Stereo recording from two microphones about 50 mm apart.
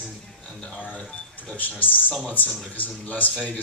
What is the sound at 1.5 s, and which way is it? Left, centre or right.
Speech, left.